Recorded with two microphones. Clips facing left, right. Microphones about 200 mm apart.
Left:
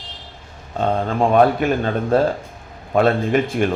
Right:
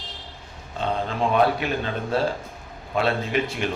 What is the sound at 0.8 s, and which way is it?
A man's voice, 50° left (ahead or behind).